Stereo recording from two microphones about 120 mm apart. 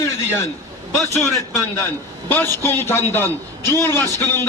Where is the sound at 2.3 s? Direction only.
20° left (ahead or behind).